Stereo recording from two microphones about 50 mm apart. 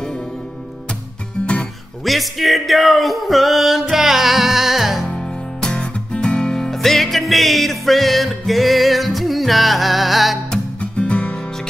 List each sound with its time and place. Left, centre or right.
1.4 s music: left
2.0 s music: centre
5.0 s music: centre
10.8 s music: left